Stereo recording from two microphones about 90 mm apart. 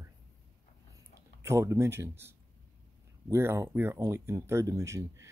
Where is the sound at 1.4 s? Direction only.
30° right (ahead or behind).